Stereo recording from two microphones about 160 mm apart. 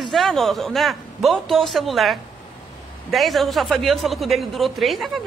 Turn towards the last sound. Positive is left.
turn(degrees=0)  # may be behind; listen again after turning